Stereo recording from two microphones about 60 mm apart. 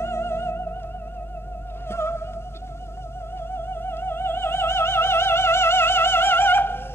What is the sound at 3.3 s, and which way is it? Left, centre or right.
Music, left.